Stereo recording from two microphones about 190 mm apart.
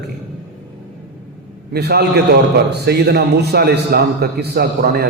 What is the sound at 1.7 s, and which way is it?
A man's voice, 60° right (ahead or behind).